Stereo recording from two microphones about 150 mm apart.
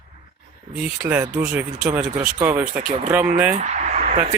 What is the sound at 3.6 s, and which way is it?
Speech, 50° right (ahead or behind).